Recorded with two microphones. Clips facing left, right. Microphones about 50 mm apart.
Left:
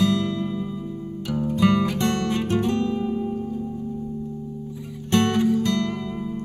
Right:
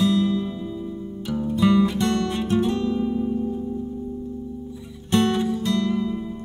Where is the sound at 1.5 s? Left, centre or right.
Left.